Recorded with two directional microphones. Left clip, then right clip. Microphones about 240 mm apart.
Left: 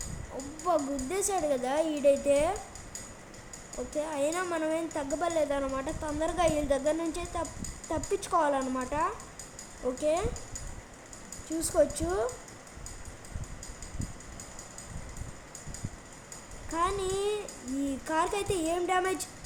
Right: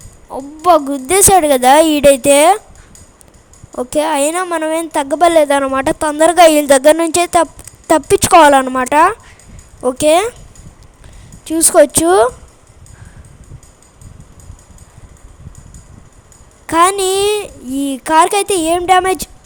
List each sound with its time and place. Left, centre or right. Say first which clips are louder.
0.6 s a woman's voice: right 19 dB; right
3.8 s a woman's voice: right 17 dB; right
11.4 s a woman's voice: right 18 dB; right
16.6 s a woman's voice: right 19 dB; right